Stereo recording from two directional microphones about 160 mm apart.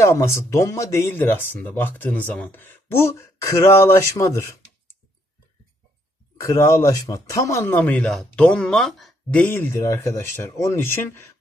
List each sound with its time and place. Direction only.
0.0 s speech: 15° left (ahead or behind)
6.4 s speech: 20° left (ahead or behind)